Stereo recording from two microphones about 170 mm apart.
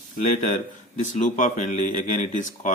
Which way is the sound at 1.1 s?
45° left (ahead or behind).